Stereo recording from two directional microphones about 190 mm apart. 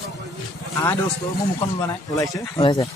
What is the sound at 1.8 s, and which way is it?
A man's voice, 15° left (ahead or behind).